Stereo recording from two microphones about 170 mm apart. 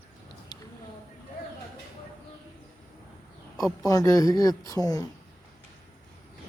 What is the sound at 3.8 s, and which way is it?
Speech, 20° left (ahead or behind).